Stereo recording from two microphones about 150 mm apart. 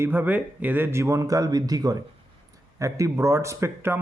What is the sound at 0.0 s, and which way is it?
Speech, 15° right (ahead or behind).